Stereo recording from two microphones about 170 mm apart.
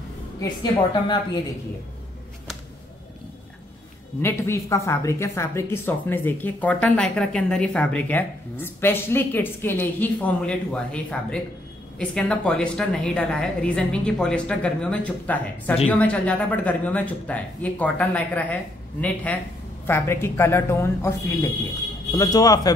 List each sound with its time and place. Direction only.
0.4 s a woman's voice: 25° left (ahead or behind)
4.2 s a woman's voice: 15° left (ahead or behind)